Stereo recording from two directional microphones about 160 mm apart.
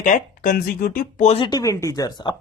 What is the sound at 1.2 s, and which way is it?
Speech, 40° left (ahead or behind).